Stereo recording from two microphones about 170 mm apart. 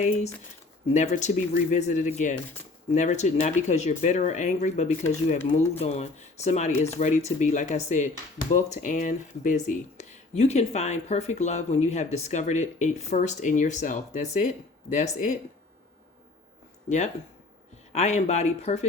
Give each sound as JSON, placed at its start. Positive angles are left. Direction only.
{"t": 0.0, "sound": "speech", "side_deg": 45}
{"t": 17.9, "sound": "speech", "side_deg": 40}